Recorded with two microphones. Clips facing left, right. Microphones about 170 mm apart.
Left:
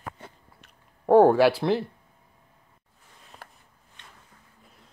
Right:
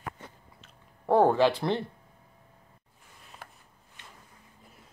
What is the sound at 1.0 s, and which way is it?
Speech, 15° left (ahead or behind).